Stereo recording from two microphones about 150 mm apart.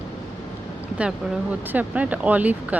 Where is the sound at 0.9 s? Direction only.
10° right (ahead or behind).